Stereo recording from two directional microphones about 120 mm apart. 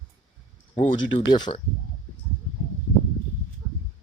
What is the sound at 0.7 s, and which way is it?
Speech, 90° left.